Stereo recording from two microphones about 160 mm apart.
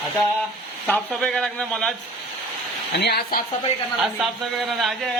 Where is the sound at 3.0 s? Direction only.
85° left.